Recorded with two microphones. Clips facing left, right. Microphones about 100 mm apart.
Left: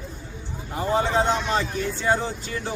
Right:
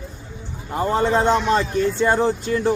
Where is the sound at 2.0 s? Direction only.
55° right (ahead or behind).